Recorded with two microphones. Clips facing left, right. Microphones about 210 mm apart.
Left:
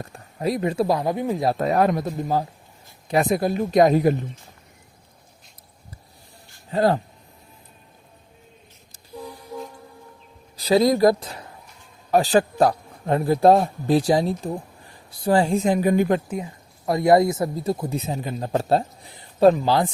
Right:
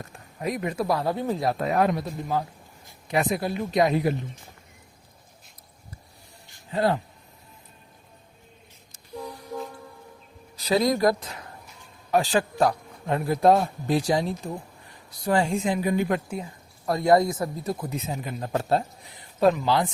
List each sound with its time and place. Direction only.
0.0 s speech: 35° left (ahead or behind)
0.9 s speech: 15° left (ahead or behind)
1.5 s a man's voice: 40° left (ahead or behind)
6.7 s a man's voice: 40° left (ahead or behind)
10.6 s a man's voice: 30° left (ahead or behind)
16.8 s speech: 20° left (ahead or behind); by 19.9 s 35° left (ahead or behind)